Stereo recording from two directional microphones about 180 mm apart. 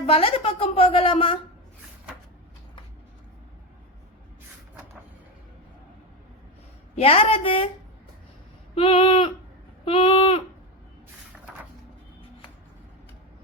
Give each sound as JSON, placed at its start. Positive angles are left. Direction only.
{"t": 0.0, "sound": "speech", "side_deg": 30}
{"t": 6.9, "sound": "speech", "side_deg": 35}
{"t": 8.7, "sound": "a sound", "side_deg": 30}